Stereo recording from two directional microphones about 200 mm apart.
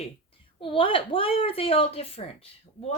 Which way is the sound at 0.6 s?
25° left (ahead or behind).